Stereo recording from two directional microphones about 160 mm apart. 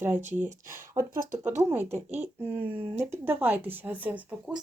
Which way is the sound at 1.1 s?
60° right (ahead or behind).